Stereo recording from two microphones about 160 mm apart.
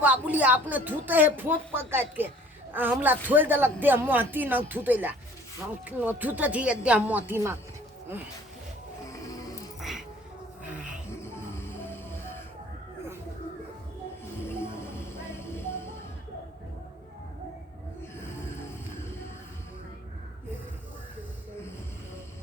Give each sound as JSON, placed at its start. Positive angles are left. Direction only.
{"t": 0.0, "sound": "a man's voice", "side_deg": -10}
{"t": 9.0, "sound": "music", "side_deg": 20}
{"t": 10.6, "sound": "music", "side_deg": -10}
{"t": 11.2, "sound": "music", "side_deg": 15}
{"t": 14.4, "sound": "music", "side_deg": 15}